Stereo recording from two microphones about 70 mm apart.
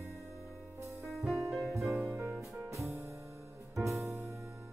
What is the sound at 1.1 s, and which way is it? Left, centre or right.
Music, centre.